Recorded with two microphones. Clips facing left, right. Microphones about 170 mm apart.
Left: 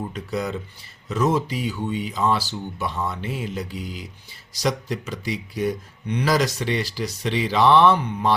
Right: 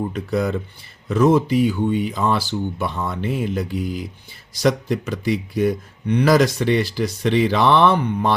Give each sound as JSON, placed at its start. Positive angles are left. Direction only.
{"t": 0.1, "sound": "speech", "side_deg": -55}